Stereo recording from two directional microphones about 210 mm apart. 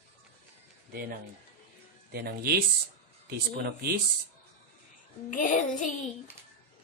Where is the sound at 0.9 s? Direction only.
45° right (ahead or behind).